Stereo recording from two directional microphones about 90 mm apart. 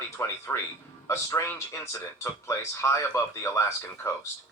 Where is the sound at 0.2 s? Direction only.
30° left (ahead or behind).